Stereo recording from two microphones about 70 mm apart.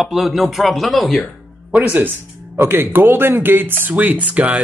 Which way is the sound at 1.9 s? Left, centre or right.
Right.